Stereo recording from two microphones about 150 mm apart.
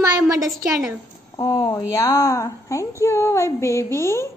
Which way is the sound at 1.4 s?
20° left (ahead or behind).